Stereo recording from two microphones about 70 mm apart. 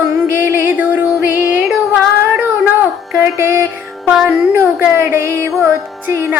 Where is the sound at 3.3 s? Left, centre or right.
Right.